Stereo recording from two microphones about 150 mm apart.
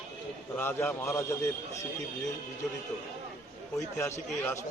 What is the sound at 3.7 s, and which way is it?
Speech, 20° left (ahead or behind).